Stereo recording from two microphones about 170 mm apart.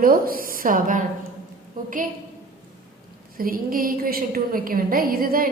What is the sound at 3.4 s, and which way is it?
A woman's voice, 60° right (ahead or behind).